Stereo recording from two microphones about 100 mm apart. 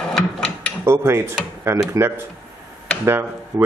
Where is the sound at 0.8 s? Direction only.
25° right (ahead or behind).